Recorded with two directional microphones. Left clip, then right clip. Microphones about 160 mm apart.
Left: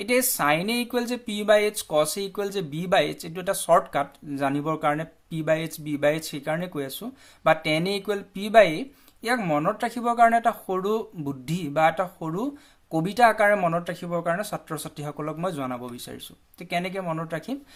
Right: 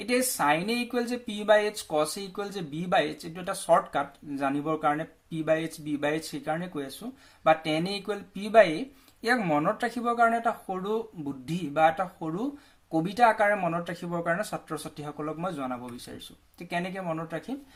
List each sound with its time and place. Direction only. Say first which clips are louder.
0.0 s speech: left 3 dB; 25° left (ahead or behind)